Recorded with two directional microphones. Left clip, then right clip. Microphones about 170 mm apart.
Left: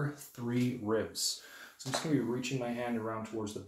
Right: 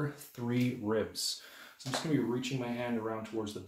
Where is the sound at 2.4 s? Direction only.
15° right (ahead or behind).